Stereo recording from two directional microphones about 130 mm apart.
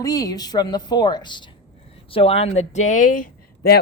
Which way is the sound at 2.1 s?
45° left (ahead or behind).